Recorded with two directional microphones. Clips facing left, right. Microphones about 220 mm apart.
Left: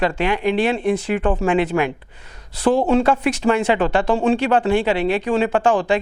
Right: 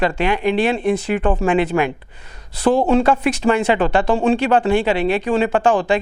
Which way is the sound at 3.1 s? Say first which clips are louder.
Right 1 dB; 15° right (ahead or behind).